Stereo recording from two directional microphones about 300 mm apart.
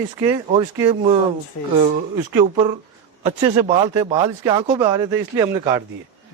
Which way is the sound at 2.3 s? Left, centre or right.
Centre.